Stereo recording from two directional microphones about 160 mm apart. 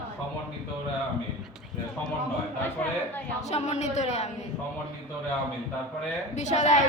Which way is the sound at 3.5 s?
45° left (ahead or behind).